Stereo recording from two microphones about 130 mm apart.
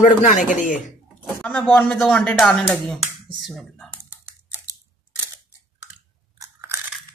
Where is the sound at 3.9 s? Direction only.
20° right (ahead or behind).